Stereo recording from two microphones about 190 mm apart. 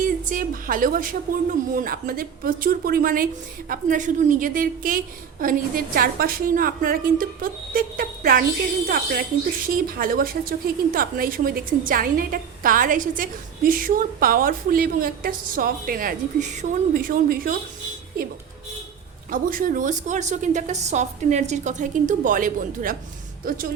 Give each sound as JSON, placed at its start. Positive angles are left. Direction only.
{"t": 0.0, "sound": "a woman's voice", "side_deg": -45}
{"t": 19.3, "sound": "a woman's voice", "side_deg": -45}